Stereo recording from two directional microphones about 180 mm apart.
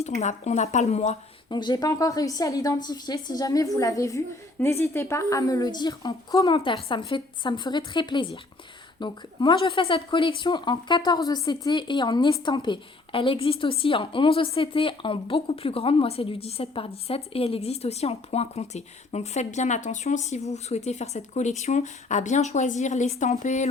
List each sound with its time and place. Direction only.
0.0 s speech: 40° left (ahead or behind)
1.5 s a woman's voice: 25° left (ahead or behind); by 23.6 s 40° left (ahead or behind)